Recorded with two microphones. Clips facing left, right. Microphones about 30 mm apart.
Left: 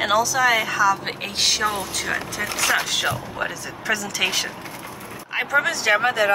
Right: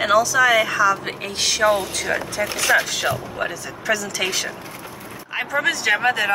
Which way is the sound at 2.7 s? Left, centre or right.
Centre.